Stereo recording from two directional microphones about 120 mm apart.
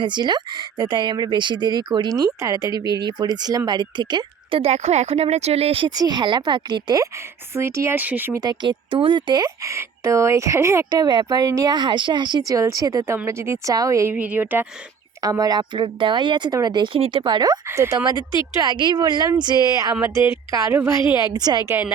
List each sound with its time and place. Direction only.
0.0 s speech: 40° right (ahead or behind)
4.6 s speech: 60° right (ahead or behind)
5.9 s speech: 35° right (ahead or behind)
7.5 s speech: 20° right (ahead or behind)
8.3 s speech: 35° right (ahead or behind)
11.0 s speech: 35° right (ahead or behind)
14.2 s speech: 15° right (ahead or behind)
15.2 s speech: 30° right (ahead or behind)
17.7 s speech: 25° right (ahead or behind)
21.3 s speech: 35° right (ahead or behind)
21.7 s speech: 20° right (ahead or behind)